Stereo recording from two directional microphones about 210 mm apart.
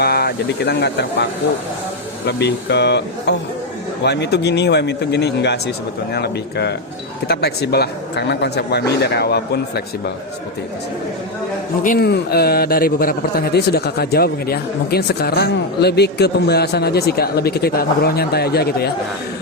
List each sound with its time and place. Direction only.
0.0 s a man's voice: 50° left (ahead or behind)
11.8 s a man's voice: 45° left (ahead or behind)